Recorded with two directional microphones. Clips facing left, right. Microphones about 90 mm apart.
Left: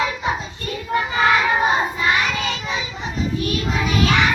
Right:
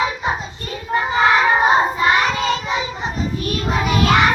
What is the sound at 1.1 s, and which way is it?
Child singing, 30° right (ahead or behind).